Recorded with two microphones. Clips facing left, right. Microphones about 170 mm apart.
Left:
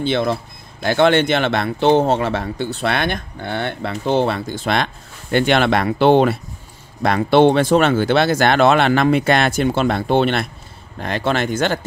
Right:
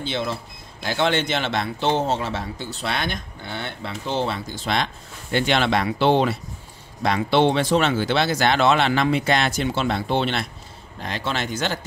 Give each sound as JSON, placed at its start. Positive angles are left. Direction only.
{"t": 0.0, "sound": "speech", "side_deg": 60}